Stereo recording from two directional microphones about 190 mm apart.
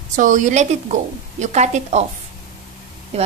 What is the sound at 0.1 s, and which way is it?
A woman's voice, 40° right (ahead or behind).